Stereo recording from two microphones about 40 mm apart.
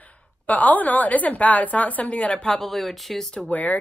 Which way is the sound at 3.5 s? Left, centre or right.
Left.